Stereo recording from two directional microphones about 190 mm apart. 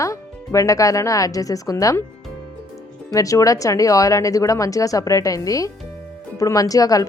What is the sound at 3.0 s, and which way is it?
Speech, 15° left (ahead or behind).